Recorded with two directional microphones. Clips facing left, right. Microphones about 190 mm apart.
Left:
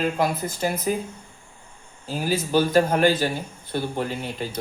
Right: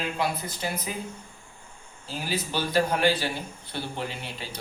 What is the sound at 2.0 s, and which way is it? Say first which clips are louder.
Speech: left 6 dB; 45° left (ahead or behind).